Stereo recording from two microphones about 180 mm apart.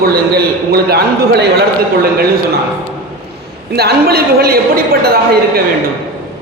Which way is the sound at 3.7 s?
60° right (ahead or behind).